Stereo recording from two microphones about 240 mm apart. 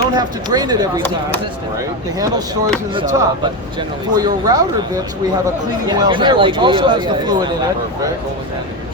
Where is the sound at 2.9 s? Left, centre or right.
Centre.